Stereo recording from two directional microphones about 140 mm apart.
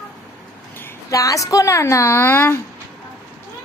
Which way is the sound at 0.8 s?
25° left (ahead or behind).